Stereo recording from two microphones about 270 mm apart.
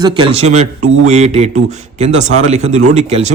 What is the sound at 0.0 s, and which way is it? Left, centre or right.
A man's voice, centre.